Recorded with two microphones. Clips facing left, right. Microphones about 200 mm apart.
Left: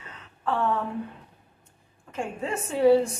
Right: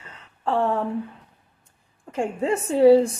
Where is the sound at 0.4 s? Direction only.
30° right (ahead or behind).